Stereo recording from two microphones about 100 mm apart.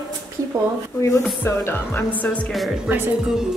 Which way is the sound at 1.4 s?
25° left (ahead or behind).